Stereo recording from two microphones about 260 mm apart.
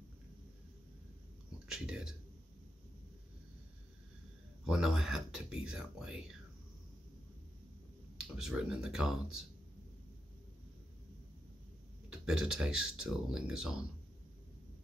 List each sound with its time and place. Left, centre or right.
1.7 s speech: centre
4.6 s speech: centre
8.2 s speech: centre
12.1 s speech: centre